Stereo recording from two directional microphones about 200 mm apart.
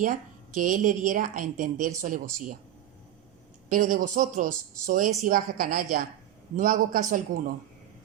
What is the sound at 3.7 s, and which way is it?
A man's voice, 45° right (ahead or behind).